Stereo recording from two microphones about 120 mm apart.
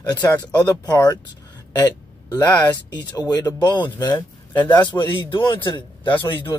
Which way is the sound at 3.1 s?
35° left (ahead or behind).